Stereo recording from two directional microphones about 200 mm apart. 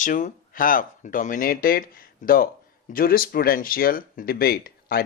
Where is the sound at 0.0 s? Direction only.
40° left (ahead or behind).